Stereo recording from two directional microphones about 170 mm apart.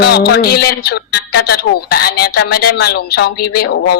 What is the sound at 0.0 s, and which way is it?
A man's voice, 70° left (ahead or behind).